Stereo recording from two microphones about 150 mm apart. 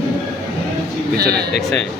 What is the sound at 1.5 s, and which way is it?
Speech, centre (ahead or behind).